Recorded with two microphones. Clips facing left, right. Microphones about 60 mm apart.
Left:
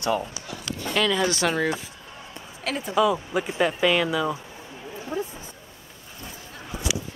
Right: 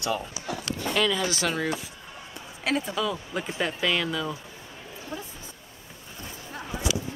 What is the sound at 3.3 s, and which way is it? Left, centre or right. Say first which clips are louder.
Speech: left 5 dB; centre.